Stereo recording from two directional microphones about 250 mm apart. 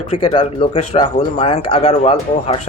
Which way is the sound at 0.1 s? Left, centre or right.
Left.